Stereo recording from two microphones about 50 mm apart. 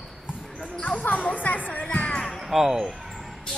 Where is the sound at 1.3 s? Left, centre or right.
Left.